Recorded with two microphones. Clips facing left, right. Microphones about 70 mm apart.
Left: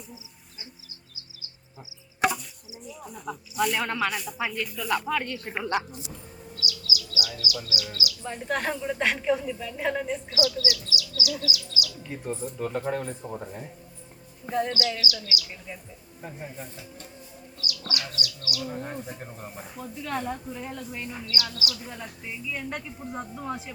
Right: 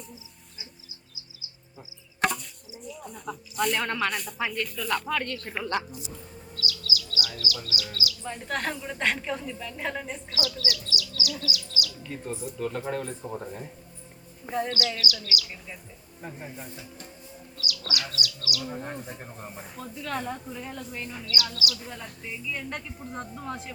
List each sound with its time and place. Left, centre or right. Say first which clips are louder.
2.2 s chop: left 2 dB; centre
2.8 s speech: even; centre
6.6 s a sound: even; centre
7.3 s speech: left 1 dB; centre
8.2 s speech: left 3 dB; centre
10.2 s speech: left 4 dB; centre
14.9 s speech: even; left
16.2 s speech: left 1 dB; centre
17.6 s speech: right 1 dB; left
18.7 s speech: left 1 dB; centre
21.5 s speech: right 1 dB; left
21.8 s speech: left 1 dB; centre